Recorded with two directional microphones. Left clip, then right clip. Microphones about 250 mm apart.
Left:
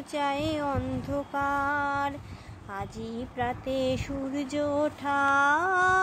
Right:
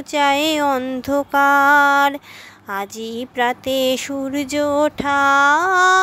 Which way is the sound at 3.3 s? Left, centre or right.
Right.